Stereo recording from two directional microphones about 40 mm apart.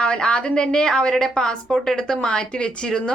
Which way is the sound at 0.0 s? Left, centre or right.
Left.